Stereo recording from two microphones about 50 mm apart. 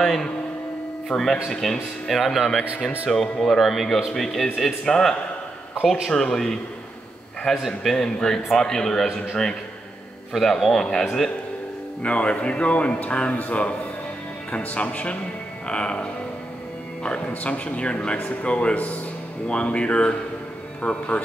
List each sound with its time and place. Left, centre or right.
0.0 s a sound: centre
1.0 s speech: centre
6.0 s a man's voice: centre
7.5 s speech: centre
7.9 s a man's voice: centre
10.4 s a man's voice: centre
12.0 s speech: left
15.6 s music: left
17.0 s speech: left